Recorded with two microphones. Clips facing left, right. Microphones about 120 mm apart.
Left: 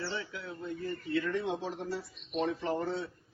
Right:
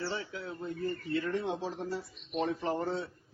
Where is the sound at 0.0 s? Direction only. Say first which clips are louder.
Right 1 dB; 35° right (ahead or behind).